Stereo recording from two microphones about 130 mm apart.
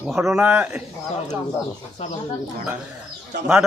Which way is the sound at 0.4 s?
15° right (ahead or behind).